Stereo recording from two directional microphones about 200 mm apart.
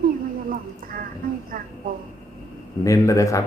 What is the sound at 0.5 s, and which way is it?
Speech, 45° right (ahead or behind).